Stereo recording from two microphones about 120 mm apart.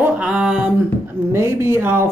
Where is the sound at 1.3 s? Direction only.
20° right (ahead or behind).